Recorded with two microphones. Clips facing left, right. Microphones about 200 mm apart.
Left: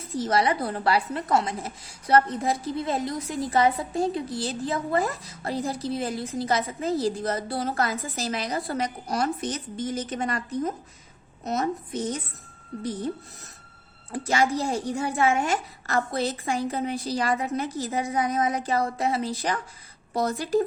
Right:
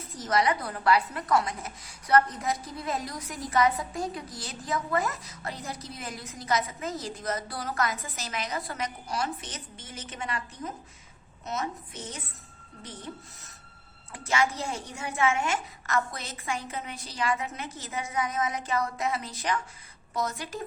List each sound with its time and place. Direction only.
0.2 s a woman's voice: 30° left (ahead or behind)
14.1 s a woman's voice: 35° left (ahead or behind)